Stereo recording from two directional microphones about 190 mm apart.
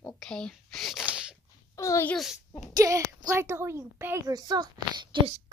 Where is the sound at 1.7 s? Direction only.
15° left (ahead or behind).